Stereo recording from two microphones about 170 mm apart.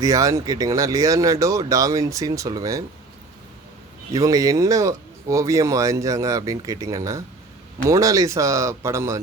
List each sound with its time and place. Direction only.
0.0 s speech: 20° right (ahead or behind)
4.1 s speech: 20° right (ahead or behind)